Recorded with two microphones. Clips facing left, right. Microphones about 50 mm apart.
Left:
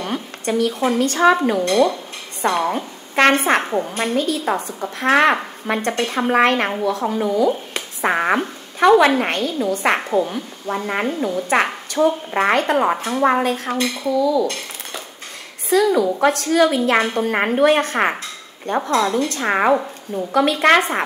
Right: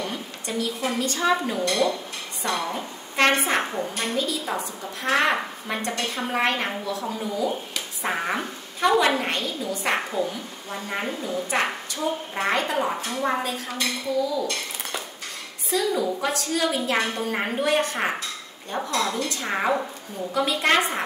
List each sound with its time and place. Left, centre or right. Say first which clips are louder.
0.0 s a sound: left 7 dB; left
0.9 s a woman's voice: left 8 dB; left
14.2 s a woman's voice: left 8 dB; left
15.7 s a woman's voice: left 8 dB; left
18.8 s a woman's voice: left 7 dB; left
19.2 s a woman's voice: left 7 dB; left